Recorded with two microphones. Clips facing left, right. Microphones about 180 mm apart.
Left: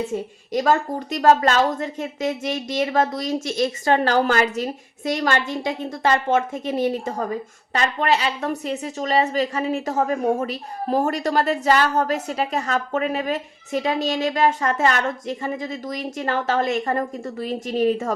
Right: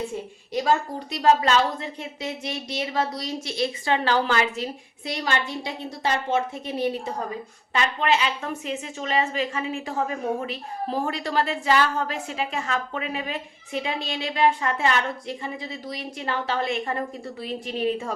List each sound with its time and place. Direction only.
0.1 s a woman's voice: 45° left (ahead or behind)